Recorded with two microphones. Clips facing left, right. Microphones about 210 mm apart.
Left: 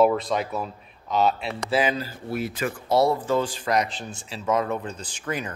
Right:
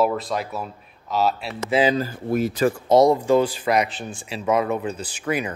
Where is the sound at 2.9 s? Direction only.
15° right (ahead or behind).